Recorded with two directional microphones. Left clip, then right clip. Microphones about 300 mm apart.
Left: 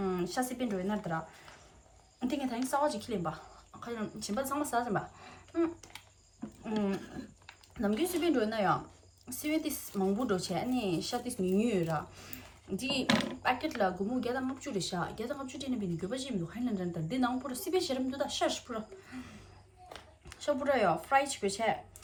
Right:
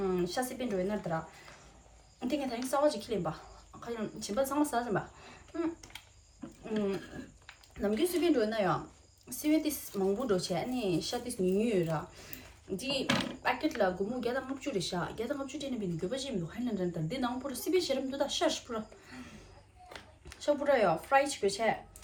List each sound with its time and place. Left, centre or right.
0.0 s speech: centre
2.2 s speech: centre
7.8 s speech: centre